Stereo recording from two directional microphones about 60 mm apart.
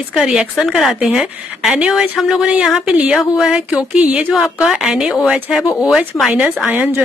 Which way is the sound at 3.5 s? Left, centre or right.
Centre.